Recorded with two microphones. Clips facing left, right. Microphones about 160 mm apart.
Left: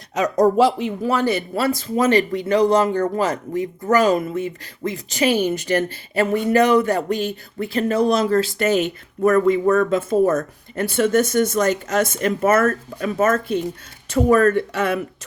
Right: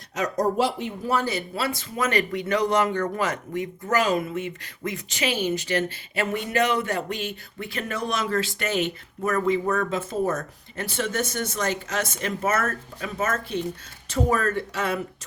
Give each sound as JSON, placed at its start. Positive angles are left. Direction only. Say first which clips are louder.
{"t": 0.2, "sound": "speech", "louder": "left 7 dB", "side_deg": 90}
{"t": 2.0, "sound": "speech", "louder": "left 7 dB", "side_deg": 30}